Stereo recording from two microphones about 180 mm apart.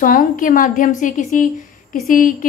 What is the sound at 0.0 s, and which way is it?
A woman's voice, 50° left (ahead or behind).